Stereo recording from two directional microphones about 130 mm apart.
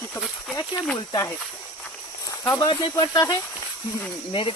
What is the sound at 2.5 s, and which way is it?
Speech, 30° left (ahead or behind).